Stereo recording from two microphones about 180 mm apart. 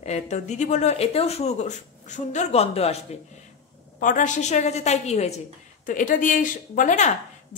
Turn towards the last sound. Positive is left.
turn(degrees=45)  # may be behind; listen again after turning